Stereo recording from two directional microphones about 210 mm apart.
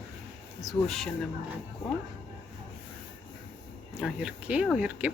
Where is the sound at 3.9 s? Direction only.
5° right (ahead or behind).